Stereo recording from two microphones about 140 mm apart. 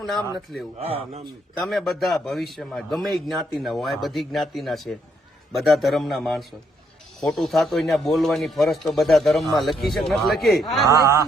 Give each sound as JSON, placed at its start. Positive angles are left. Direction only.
{"t": 0.0, "sound": "a man's voice", "side_deg": 0}
{"t": 0.8, "sound": "speech", "side_deg": -45}
{"t": 1.6, "sound": "a man's voice", "side_deg": 0}
{"t": 10.8, "sound": "speech", "side_deg": -25}